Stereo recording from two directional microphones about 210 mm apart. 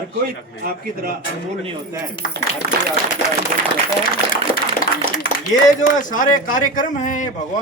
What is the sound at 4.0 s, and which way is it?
A man's voice, 40° left (ahead or behind).